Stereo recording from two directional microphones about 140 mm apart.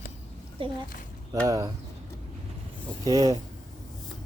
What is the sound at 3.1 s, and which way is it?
Speech, 25° right (ahead or behind).